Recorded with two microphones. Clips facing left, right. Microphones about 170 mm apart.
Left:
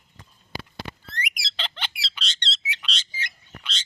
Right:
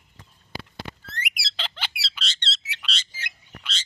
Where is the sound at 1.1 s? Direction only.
5° right (ahead or behind).